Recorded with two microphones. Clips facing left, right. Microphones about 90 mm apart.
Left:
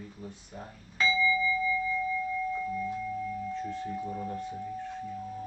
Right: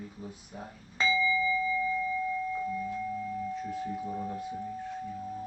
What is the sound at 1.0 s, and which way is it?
Doorbell, 25° right (ahead or behind).